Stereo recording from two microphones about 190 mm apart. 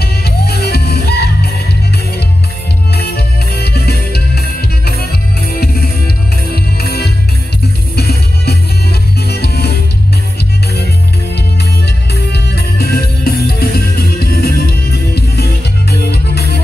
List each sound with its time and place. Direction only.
0.0 s music: 55° left (ahead or behind)
2.9 s music: 55° left (ahead or behind)
11.3 s music: 60° left (ahead or behind)